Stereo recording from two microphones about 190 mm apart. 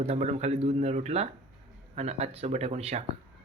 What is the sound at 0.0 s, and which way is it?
Speech, 35° right (ahead or behind).